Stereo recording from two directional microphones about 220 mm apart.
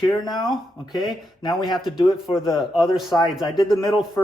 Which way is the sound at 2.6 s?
Centre (ahead or behind).